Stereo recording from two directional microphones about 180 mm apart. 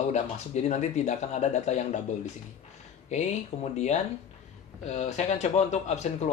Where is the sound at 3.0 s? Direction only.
40° left (ahead or behind).